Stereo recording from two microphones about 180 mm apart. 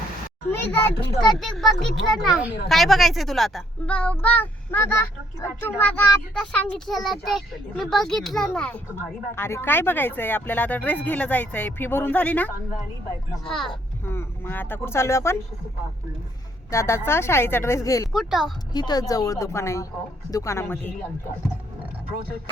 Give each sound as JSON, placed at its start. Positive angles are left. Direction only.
{"t": 0.5, "sound": "a child's voice", "side_deg": 10}
{"t": 14.0, "sound": "speech", "side_deg": 15}
{"t": 16.7, "sound": "speech", "side_deg": 15}
{"t": 18.1, "sound": "a child's voice", "side_deg": 0}
{"t": 18.7, "sound": "speech", "side_deg": 25}